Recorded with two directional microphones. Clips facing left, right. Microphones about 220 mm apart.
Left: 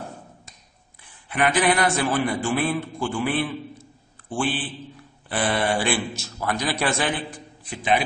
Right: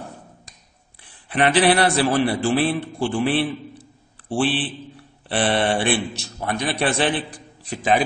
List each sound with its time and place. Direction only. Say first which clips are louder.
1.3 s a man's voice: right 4 dB; 35° right (ahead or behind)
4.6 s mantra: right 4 dB; 35° right (ahead or behind)
6.2 s a man's voice: right 1 dB; 30° right (ahead or behind)